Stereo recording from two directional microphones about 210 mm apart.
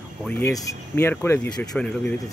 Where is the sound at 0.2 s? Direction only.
10° left (ahead or behind).